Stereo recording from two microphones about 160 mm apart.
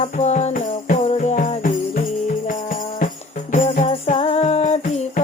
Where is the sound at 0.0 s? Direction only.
45° left (ahead or behind).